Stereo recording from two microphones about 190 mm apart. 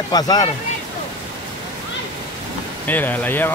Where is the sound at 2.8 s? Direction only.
10° left (ahead or behind).